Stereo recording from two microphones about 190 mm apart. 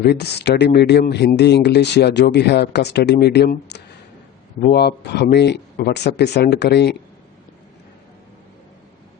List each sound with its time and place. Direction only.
0.0 s speech: 60° left (ahead or behind)